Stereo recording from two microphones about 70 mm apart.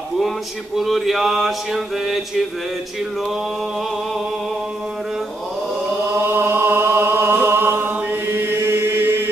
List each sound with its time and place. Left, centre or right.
0.7 s mantra: centre
6.1 s chant: right